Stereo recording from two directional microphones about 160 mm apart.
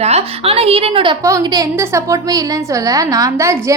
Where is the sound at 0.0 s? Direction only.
40° right (ahead or behind).